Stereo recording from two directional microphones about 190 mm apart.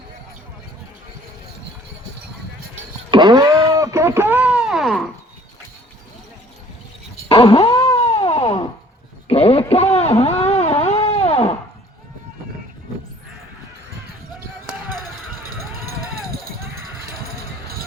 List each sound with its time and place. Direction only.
3.1 s wail: 25° right (ahead or behind); by 5.0 s centre (ahead or behind)
7.3 s a sound: 30° left (ahead or behind)
15.4 s run: 50° right (ahead or behind)